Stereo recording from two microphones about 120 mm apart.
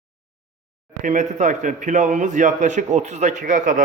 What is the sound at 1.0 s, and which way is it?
A man's voice, 90° right.